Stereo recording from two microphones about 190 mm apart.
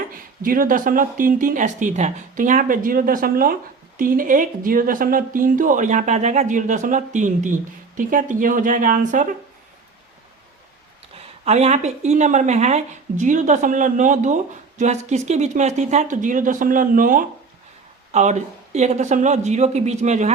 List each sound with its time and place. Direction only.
0.1 s speech: 45° right (ahead or behind)
11.4 s speech: 35° right (ahead or behind)